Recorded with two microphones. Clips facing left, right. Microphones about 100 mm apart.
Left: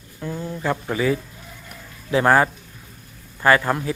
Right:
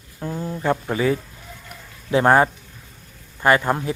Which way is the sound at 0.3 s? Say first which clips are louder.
Right 3 dB; 15° right (ahead or behind).